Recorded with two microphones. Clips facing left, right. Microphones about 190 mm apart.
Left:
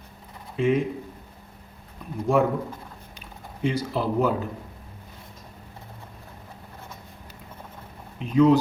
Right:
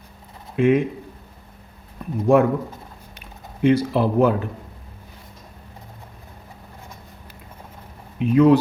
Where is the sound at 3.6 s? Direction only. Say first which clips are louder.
Right 8 dB; 65° right (ahead or behind).